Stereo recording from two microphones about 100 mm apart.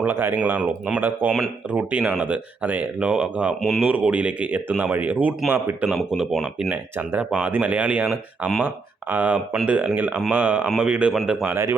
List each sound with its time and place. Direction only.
0.0 s speech: 20° right (ahead or behind)
3.6 s speech: centre (ahead or behind)
3.8 s speech: 15° right (ahead or behind)
5.9 s speech: 5° right (ahead or behind)
11.4 s speech: 25° right (ahead or behind)